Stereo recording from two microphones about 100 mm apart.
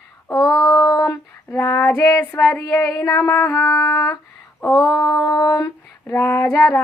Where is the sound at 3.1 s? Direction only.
35° left (ahead or behind).